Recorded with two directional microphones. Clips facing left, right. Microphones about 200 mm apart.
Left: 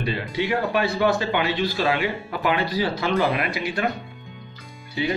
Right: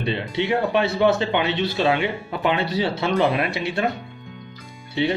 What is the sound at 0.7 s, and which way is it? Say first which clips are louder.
A man's voice: right 3 dB; 25° right (ahead or behind).